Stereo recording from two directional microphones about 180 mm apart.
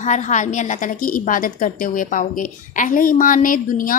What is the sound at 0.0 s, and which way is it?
A woman's voice, 40° left (ahead or behind).